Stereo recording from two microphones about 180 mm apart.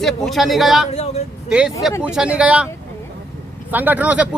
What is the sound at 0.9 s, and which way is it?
Vehicle, 35° left (ahead or behind).